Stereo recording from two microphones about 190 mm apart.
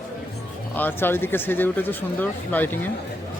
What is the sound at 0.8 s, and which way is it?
Speech, 10° left (ahead or behind).